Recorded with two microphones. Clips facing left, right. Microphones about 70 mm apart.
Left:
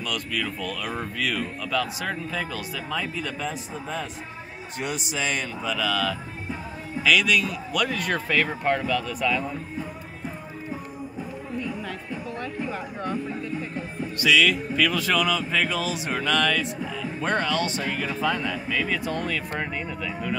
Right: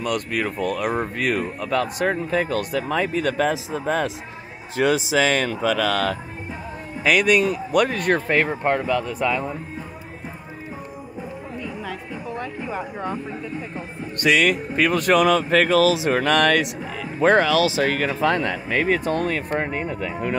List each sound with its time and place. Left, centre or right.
0.0 s speech: right
4.8 s speech: right
5.1 s speech: right
7.0 s speech: right
12.4 s chatter: centre
14.1 s speech: right
16.8 s music: right
17.2 s speech: right